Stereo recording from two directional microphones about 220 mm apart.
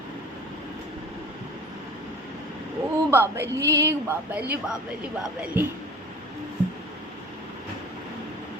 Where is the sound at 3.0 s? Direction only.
10° right (ahead or behind).